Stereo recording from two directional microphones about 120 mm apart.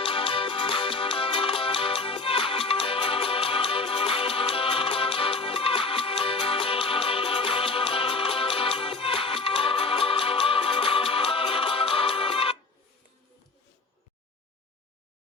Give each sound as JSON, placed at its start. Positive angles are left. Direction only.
{"t": 0.0, "sound": "music", "side_deg": 50}